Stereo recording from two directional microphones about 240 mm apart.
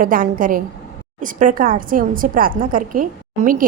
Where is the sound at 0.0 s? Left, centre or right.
Right.